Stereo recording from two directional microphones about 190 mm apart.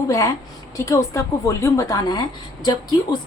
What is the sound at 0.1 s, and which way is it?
A woman's voice, 15° left (ahead or behind).